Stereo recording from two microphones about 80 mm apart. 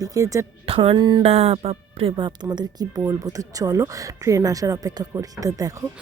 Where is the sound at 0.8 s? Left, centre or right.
Right.